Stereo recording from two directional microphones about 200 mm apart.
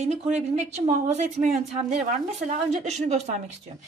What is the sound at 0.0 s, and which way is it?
Speech, 35° right (ahead or behind).